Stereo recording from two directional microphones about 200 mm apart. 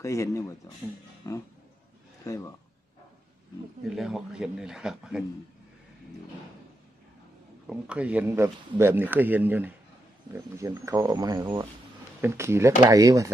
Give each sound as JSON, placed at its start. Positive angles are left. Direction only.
{"t": 0.0, "sound": "speech", "side_deg": 15}
{"t": 3.8, "sound": "a man's voice", "side_deg": 0}
{"t": 7.6, "sound": "speech", "side_deg": -5}